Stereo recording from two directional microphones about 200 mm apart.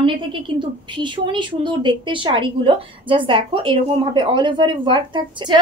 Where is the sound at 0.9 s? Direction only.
25° right (ahead or behind).